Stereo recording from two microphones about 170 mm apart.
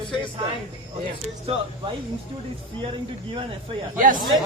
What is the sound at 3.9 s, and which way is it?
Speech, 50° right (ahead or behind).